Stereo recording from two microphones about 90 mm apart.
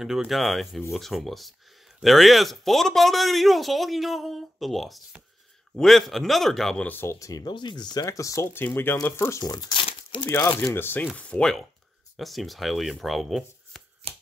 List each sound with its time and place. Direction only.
0.0 s speech: 5° right (ahead or behind)
6.9 s speech: 25° left (ahead or behind)
7.2 s speech: 40° left (ahead or behind)
7.4 s speech: 55° left (ahead or behind); by 8.5 s 35° left (ahead or behind)
8.5 s speech: 25° left (ahead or behind)
9.4 s speech: 50° left (ahead or behind)
10.2 s speech: 30° left (ahead or behind)
11.1 s speech: 10° left (ahead or behind)
12.2 s speech: centre (ahead or behind)